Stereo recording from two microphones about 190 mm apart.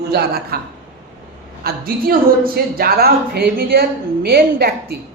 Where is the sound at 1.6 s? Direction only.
50° right (ahead or behind).